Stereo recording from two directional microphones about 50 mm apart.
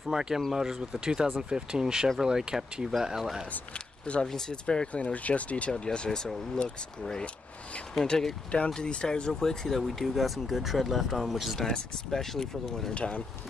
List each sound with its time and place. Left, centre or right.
0.1 s speech: centre
3.7 s speech: centre
5.8 s speech: centre
7.9 s speech: centre
12.9 s speech: left